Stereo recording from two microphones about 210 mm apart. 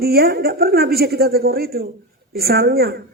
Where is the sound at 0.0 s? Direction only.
45° right (ahead or behind).